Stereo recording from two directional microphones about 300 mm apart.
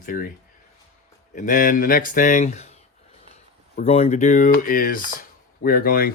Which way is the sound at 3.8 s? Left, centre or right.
Centre.